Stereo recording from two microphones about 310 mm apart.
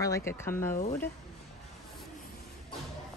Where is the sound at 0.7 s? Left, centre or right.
Left.